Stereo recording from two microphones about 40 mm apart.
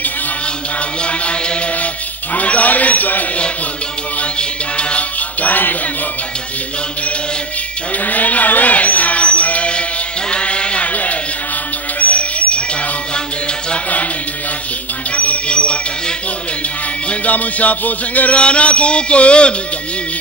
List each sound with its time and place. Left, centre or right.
1.0 s mantra: left
2.3 s music: left
4.2 s a sound: left
5.4 s music: left
8.0 s music: left
10.3 s a sound: left
12.0 s bird: left
15.1 s music: left
17.1 s music: left
18.4 s a sound: left